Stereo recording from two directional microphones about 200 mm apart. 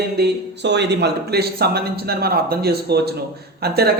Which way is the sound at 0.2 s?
60° right (ahead or behind).